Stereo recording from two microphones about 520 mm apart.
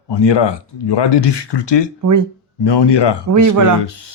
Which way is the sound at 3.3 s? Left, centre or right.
Right.